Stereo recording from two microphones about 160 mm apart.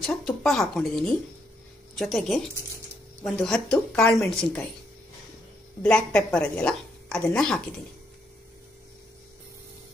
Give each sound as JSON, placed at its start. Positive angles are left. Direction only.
{"t": 0.0, "sound": "speech", "side_deg": 0}
{"t": 5.8, "sound": "speech", "side_deg": 5}